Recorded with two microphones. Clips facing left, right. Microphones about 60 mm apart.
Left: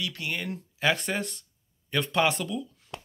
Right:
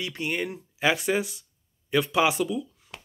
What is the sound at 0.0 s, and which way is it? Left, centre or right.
A man's voice, right.